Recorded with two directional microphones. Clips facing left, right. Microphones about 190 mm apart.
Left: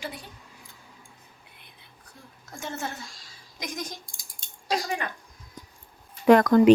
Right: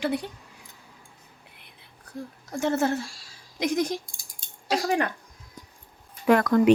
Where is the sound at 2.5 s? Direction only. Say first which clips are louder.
Right 11 dB; 65° right (ahead or behind).